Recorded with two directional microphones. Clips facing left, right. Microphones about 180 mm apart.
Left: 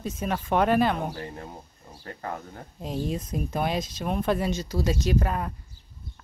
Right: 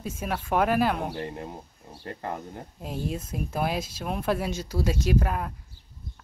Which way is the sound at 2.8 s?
5° right (ahead or behind).